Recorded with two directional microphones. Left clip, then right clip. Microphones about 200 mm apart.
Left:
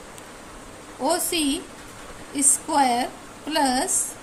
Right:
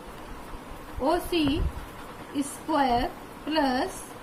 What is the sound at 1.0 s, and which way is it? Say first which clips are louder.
Speech: left 2 dB; 60° left (ahead or behind).